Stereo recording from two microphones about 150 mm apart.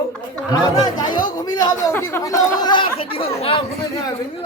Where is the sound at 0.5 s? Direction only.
30° left (ahead or behind).